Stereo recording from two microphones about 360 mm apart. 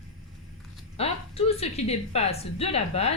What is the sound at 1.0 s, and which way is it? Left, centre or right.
A woman's voice, centre.